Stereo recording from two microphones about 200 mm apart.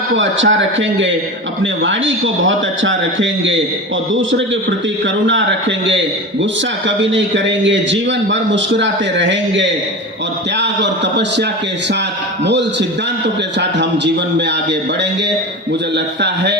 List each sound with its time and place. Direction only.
0.2 s a man's voice: 70° right (ahead or behind)
13.2 s a man's voice: 60° right (ahead or behind)
16.2 s a man's voice: 60° right (ahead or behind)